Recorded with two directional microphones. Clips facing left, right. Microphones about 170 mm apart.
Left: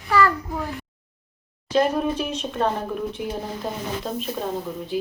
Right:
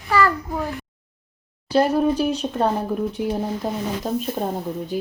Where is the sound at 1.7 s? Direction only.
35° right (ahead or behind).